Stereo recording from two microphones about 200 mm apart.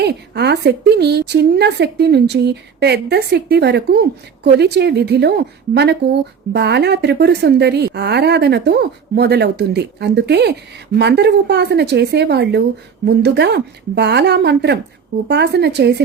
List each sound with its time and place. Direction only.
0.0 s speech: 55° right (ahead or behind)